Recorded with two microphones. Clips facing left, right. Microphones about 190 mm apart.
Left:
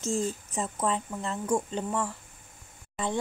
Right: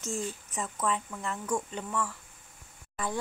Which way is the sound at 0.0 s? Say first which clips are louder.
Left 5 dB; 40° left (ahead or behind).